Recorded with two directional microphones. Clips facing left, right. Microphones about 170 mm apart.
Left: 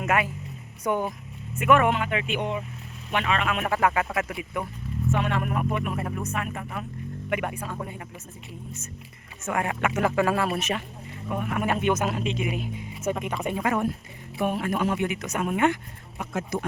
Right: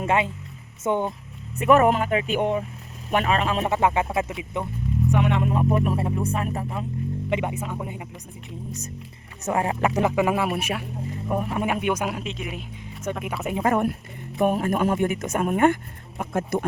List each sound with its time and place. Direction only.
0.0 s speech: 25° right (ahead or behind)
1.5 s speech: 35° right (ahead or behind); by 8.0 s 15° right (ahead or behind)
9.4 s speech: 30° right (ahead or behind)
10.0 s speech: 15° right (ahead or behind)
11.3 s speech: 30° right (ahead or behind)
11.6 s a man's voice: 10° right (ahead or behind); by 13.2 s 5° left (ahead or behind)
13.2 s a man's voice: 5° right (ahead or behind)
13.7 s speech: 50° right (ahead or behind)